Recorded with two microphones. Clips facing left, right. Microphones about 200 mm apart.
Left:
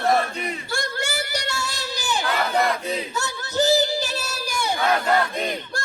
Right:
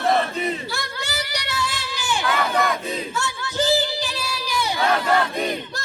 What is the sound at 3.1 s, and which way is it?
Singing, 40° left (ahead or behind).